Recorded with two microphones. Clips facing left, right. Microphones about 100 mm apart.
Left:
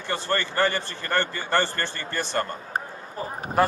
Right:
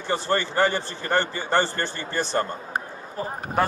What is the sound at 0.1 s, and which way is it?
A man's voice, 15° right (ahead or behind).